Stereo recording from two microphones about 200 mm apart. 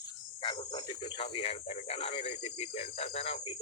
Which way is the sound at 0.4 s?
20° left (ahead or behind).